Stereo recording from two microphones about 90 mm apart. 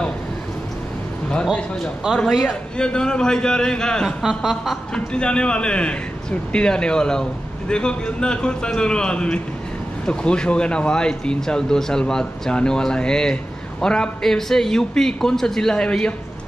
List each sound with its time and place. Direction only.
1.3 s speech: 10° left (ahead or behind)
4.2 s a sound: 5° right (ahead or behind)
5.1 s speech: 10° left (ahead or behind)